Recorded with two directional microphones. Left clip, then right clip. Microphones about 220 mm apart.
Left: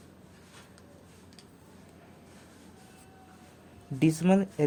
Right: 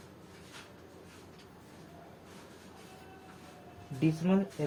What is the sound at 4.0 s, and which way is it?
Speech, 50° left (ahead or behind).